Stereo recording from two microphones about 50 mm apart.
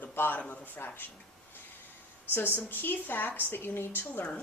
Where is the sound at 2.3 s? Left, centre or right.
Left.